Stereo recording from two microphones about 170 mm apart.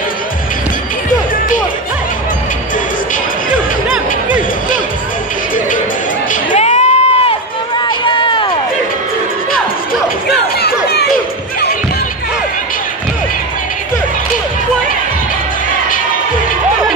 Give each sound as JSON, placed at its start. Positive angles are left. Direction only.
{"t": 6.5, "sound": "run", "side_deg": 40}
{"t": 10.6, "sound": "chatter", "side_deg": 70}